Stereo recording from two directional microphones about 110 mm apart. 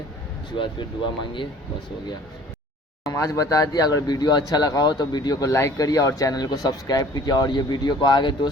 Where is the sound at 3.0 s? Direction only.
30° left (ahead or behind).